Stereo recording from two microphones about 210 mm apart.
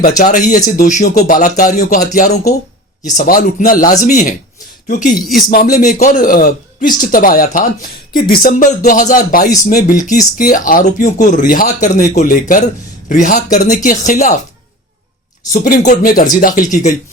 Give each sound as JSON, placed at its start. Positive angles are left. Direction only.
{"t": 0.2, "sound": "a man's voice", "side_deg": 40}
{"t": 15.5, "sound": "a man's voice", "side_deg": 35}